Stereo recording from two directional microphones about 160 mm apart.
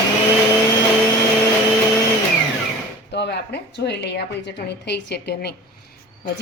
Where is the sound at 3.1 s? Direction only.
90° left.